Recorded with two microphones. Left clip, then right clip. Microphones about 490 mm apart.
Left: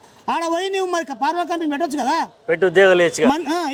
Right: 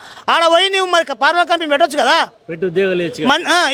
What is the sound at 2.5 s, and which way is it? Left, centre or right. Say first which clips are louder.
Speech: left 6 dB; left.